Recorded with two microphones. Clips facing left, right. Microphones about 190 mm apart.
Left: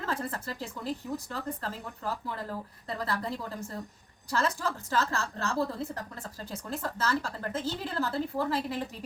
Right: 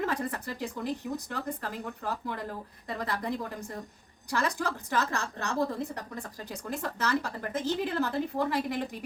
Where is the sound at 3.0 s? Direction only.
15° right (ahead or behind).